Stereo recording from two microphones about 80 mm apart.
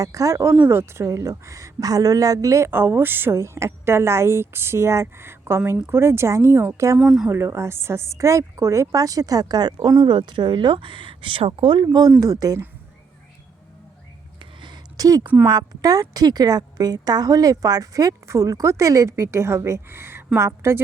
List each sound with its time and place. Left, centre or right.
0.0 s a woman's voice: right
2.6 s a woman's voice: right
7.0 s speech: centre
7.3 s a woman's voice: right
14.9 s a woman's voice: right